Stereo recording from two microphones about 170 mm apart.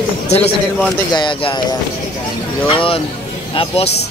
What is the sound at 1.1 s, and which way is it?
Speech, 30° left (ahead or behind).